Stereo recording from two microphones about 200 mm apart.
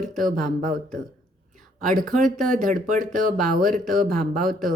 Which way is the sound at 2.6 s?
40° right (ahead or behind).